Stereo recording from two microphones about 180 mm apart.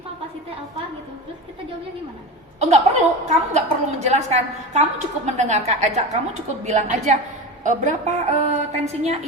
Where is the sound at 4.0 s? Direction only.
35° right (ahead or behind).